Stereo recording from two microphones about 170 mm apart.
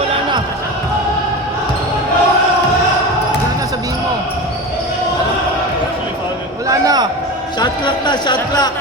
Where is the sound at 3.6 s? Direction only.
20° right (ahead or behind).